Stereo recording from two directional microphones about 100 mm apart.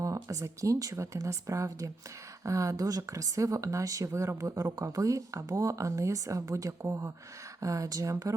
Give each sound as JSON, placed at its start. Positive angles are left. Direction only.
{"t": 0.0, "sound": "speech", "side_deg": -35}